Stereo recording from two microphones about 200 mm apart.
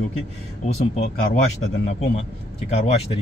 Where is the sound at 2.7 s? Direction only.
30° left (ahead or behind).